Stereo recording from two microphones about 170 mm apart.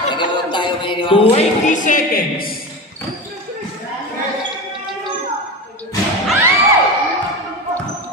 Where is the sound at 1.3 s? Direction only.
40° left (ahead or behind); by 2.6 s 60° left (ahead or behind).